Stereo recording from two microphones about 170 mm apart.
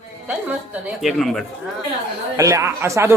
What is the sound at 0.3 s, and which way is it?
Speech, 5° right (ahead or behind).